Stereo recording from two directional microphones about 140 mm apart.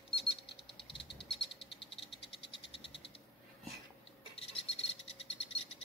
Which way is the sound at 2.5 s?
40° left (ahead or behind).